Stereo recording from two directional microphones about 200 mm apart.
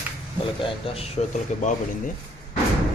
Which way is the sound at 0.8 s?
30° left (ahead or behind).